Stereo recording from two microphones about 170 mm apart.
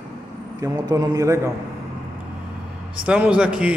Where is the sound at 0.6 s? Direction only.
20° right (ahead or behind).